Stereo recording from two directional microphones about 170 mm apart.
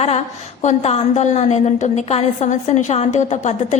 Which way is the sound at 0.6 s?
40° left (ahead or behind).